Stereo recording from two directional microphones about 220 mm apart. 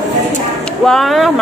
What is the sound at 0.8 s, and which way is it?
Speech, centre (ahead or behind).